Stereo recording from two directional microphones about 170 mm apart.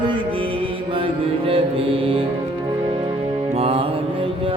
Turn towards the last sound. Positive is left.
turn(degrees=-35)  # may be behind; listen again after turning